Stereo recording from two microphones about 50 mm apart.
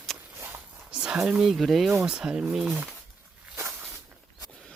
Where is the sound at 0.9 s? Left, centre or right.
Centre.